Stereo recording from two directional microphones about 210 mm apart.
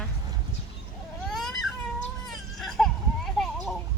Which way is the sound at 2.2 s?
Centre (ahead or behind).